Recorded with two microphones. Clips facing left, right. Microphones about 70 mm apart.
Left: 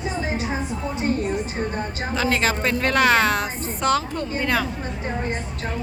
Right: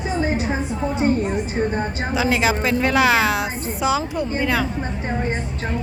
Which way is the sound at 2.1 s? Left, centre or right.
Centre.